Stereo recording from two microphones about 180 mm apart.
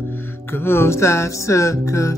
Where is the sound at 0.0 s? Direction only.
10° left (ahead or behind).